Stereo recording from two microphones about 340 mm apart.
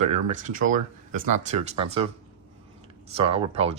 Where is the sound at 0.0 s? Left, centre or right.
Right.